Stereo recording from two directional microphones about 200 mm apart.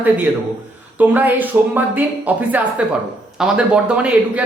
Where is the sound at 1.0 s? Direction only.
10° right (ahead or behind).